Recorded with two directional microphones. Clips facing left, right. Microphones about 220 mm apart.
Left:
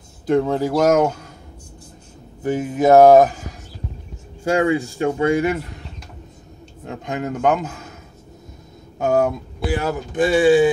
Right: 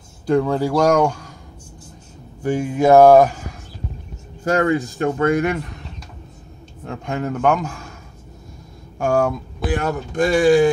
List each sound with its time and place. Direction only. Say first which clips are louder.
0.3 s speech: even; 20° left (ahead or behind)
2.4 s speech: right 1 dB; 20° left (ahead or behind)
4.5 s speech: even; 10° left (ahead or behind)
6.8 s speech: right 1 dB; 20° left (ahead or behind)
8.9 s speech: left 1 dB; 20° left (ahead or behind)
9.6 s speech: even; 10° left (ahead or behind)